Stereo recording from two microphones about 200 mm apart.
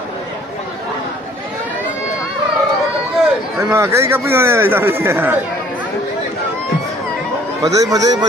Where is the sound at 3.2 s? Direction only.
15° right (ahead or behind).